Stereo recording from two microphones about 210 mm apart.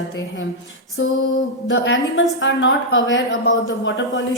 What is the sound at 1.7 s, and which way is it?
A woman's voice, 65° left (ahead or behind).